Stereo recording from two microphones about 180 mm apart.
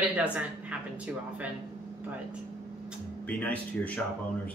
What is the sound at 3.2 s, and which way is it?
Speech, 10° left (ahead or behind).